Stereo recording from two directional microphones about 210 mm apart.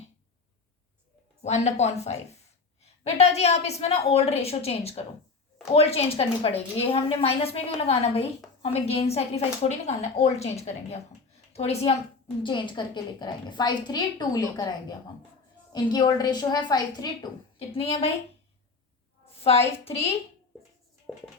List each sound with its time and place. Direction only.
1.4 s a woman's voice: 30° left (ahead or behind)
19.4 s a woman's voice: 30° left (ahead or behind)